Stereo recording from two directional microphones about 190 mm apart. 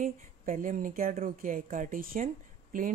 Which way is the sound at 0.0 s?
45° right (ahead or behind).